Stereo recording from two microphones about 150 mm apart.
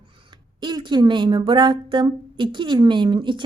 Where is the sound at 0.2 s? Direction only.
30° right (ahead or behind).